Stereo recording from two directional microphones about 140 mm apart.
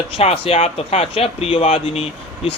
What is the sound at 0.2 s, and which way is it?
Speech, 45° left (ahead or behind).